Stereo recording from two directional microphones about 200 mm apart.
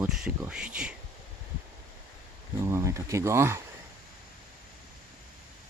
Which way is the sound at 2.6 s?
15° right (ahead or behind).